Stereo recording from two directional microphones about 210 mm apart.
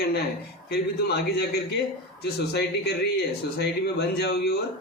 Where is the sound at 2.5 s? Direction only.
50° left (ahead or behind).